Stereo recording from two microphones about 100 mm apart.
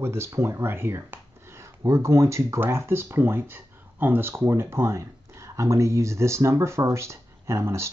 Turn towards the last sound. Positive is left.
turn(degrees=-25)  # may be behind; listen again after turning